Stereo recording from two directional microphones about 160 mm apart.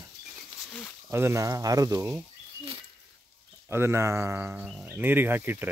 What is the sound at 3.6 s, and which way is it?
Speech, 15° right (ahead or behind).